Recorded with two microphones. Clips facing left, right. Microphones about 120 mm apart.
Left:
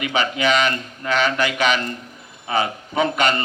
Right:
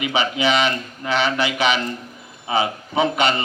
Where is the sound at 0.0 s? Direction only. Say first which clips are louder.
Even; 50° left (ahead or behind).